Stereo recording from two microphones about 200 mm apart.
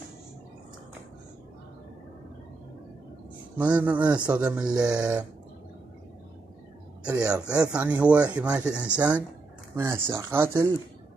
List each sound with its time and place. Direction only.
3.5 s speech: 10° right (ahead or behind)
7.1 s speech: 5° right (ahead or behind)